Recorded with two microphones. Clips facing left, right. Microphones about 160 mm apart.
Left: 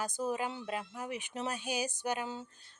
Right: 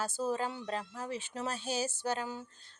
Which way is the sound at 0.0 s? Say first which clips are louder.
Right 1 dB; 15° left (ahead or behind).